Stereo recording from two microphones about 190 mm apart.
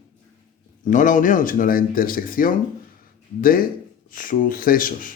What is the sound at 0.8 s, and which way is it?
A man's voice, 45° left (ahead or behind).